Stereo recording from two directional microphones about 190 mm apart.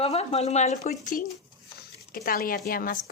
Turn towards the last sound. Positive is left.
turn(degrees=50)  # may be behind; listen again after turning